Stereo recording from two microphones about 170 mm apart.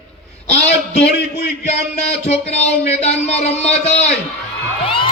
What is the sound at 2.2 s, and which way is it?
A man's voice, 40° left (ahead or behind).